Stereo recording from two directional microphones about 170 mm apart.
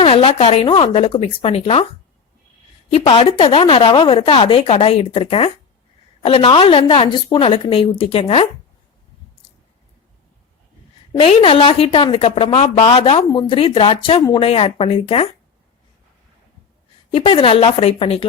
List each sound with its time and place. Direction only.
0.0 s speech: 30° left (ahead or behind)
2.9 s speech: 30° left (ahead or behind)
11.3 s speech: 35° left (ahead or behind)
17.1 s speech: 30° left (ahead or behind)